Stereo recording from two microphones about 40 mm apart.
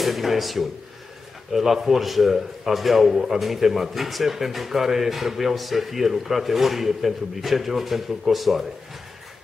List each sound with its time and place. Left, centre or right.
0.0 s a man's voice: centre